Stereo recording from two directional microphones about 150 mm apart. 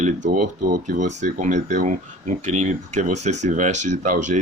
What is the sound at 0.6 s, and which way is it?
Speech, 60° right (ahead or behind).